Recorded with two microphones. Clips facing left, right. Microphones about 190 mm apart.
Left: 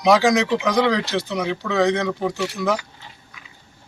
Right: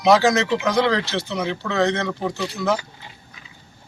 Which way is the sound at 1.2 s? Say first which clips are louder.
Left 1 dB; centre (ahead or behind).